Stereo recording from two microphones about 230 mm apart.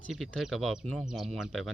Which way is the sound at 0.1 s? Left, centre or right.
Centre.